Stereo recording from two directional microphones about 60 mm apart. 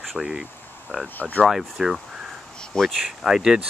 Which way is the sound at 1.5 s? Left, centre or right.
Centre.